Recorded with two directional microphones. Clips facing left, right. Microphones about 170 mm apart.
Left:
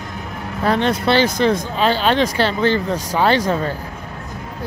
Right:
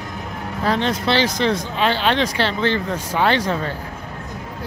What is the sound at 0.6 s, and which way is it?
Speech, 55° left (ahead or behind).